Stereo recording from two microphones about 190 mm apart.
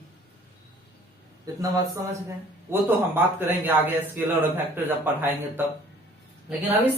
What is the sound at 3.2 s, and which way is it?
Speech, 10° right (ahead or behind).